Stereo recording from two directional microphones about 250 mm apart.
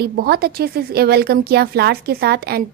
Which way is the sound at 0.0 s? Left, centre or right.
Right.